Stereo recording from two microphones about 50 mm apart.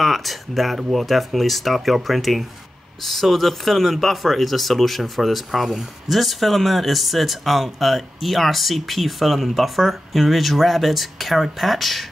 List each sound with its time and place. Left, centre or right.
0.0 s speech: centre